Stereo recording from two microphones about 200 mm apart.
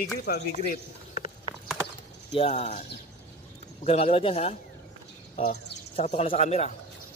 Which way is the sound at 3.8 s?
30° left (ahead or behind).